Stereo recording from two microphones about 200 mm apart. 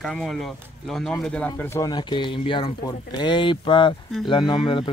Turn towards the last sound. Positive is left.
turn(degrees=25)  # may be behind; listen again after turning